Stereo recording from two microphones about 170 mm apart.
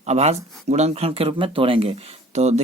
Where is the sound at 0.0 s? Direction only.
40° right (ahead or behind).